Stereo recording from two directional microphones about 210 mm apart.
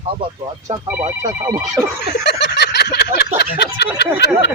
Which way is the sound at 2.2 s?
55° left (ahead or behind).